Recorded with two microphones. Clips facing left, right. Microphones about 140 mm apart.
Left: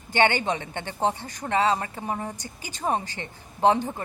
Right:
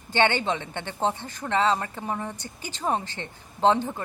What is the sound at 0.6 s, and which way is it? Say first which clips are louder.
Speech: even; 50° left (ahead or behind).